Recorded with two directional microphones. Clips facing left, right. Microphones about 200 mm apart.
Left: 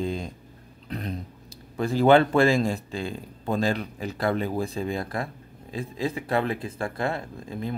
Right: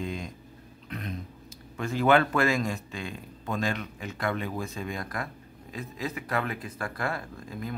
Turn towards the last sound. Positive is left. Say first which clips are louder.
# left 4 dB
turn(degrees=25)  # may be behind; listen again after turning